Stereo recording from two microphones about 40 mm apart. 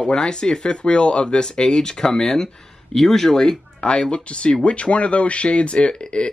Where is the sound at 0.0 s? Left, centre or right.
Centre.